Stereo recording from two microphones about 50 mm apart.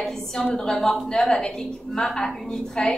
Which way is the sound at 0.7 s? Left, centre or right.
Centre.